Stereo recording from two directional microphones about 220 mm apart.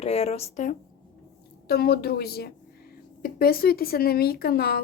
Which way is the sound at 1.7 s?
45° left (ahead or behind).